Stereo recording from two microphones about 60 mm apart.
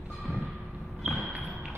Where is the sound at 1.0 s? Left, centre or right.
Centre.